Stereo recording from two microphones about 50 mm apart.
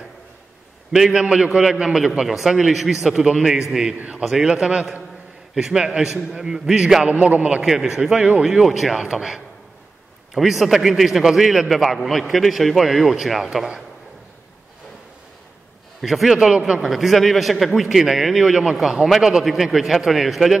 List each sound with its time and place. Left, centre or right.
1.1 s a man's voice: centre
7.1 s a man's voice: right
7.6 s a man's voice: centre
16.0 s a man's voice: centre
16.5 s a man's voice: centre
16.9 s a man's voice: centre